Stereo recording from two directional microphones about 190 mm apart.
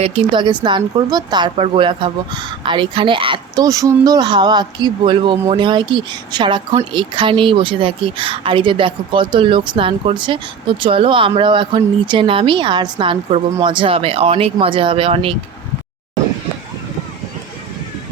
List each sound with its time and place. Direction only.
0.0 s speech: 30° right (ahead or behind)